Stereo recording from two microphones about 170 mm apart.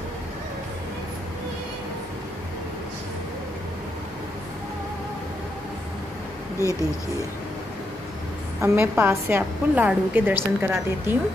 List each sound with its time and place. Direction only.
6.6 s speech: 20° right (ahead or behind)
8.5 s a woman's voice: 15° right (ahead or behind)